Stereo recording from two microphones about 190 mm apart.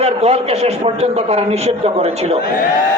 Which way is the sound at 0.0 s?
35° right (ahead or behind).